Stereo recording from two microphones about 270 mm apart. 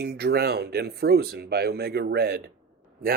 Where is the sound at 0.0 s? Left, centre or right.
Right.